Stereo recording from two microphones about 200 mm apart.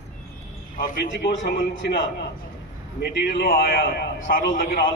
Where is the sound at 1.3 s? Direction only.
65° left (ahead or behind).